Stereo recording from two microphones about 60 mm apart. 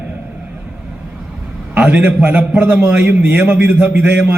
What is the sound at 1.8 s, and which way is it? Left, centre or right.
A man's voice, right.